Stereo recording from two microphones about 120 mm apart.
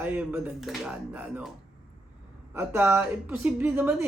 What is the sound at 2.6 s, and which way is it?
Speech, 20° right (ahead or behind).